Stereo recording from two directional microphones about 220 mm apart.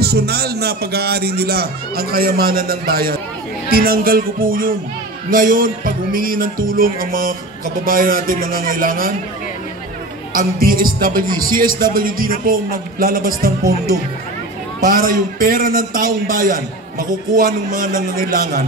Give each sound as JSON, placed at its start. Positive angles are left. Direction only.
{"t": 0.0, "sound": "a man's voice", "side_deg": -45}
{"t": 10.3, "sound": "speech", "side_deg": -40}